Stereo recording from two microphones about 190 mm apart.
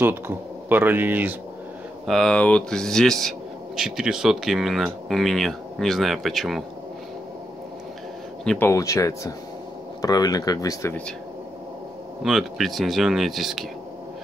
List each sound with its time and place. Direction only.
0.0 s speech: 10° right (ahead or behind)
2.0 s speech: centre (ahead or behind)
8.5 s speech: 10° left (ahead or behind)
12.2 s speech: centre (ahead or behind)